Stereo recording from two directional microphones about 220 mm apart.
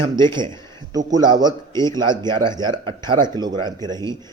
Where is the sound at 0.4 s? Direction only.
15° left (ahead or behind).